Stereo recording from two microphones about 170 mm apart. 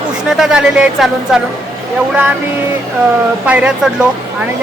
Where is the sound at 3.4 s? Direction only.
5° right (ahead or behind).